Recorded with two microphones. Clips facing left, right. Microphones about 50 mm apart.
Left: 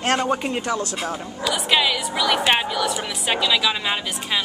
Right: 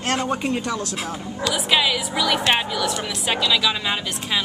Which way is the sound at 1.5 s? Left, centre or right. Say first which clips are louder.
Even; centre.